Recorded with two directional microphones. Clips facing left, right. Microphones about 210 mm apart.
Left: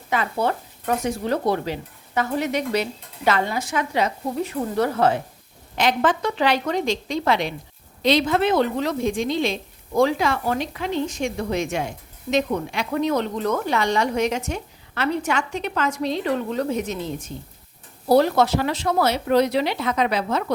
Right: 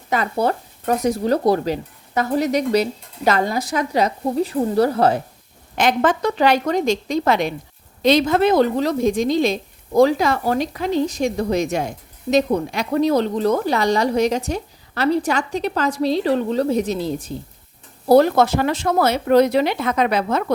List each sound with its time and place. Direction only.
0.1 s a woman's voice: 40° right (ahead or behind)
18.1 s speech: 50° right (ahead or behind)